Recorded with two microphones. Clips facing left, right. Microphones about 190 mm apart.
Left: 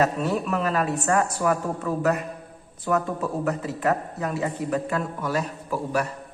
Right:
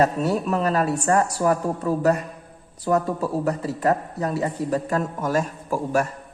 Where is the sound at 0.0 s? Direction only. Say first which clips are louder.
Right 2 dB; 40° right (ahead or behind).